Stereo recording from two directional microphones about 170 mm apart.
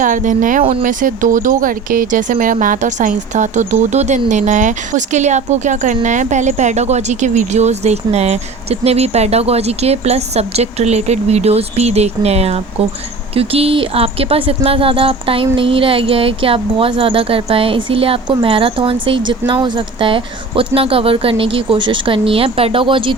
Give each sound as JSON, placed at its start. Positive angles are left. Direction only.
{"t": 0.0, "sound": "speech", "side_deg": -50}